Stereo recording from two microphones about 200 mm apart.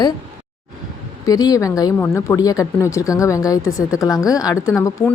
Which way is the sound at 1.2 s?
20° left (ahead or behind).